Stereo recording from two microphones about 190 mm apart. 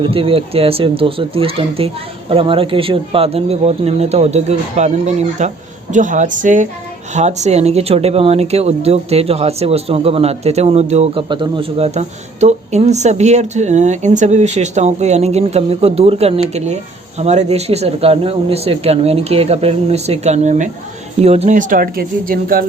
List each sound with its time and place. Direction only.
0.0 s speech: 30° right (ahead or behind); by 22.6 s 50° right (ahead or behind)